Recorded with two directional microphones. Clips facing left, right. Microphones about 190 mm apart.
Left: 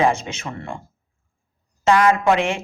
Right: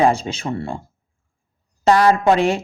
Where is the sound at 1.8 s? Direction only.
35° right (ahead or behind).